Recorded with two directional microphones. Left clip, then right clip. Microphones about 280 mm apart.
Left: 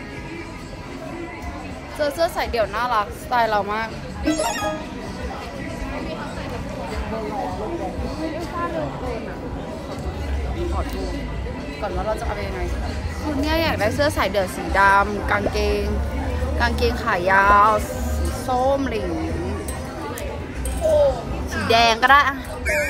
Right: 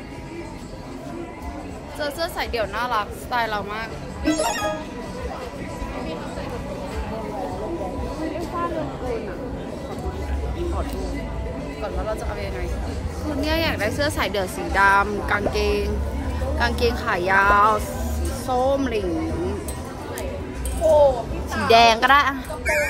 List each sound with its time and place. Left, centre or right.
2.0 s speech: centre
3.6 s speech: centre
4.2 s speech: centre
13.4 s speech: centre
21.6 s speech: centre
22.7 s a sound: centre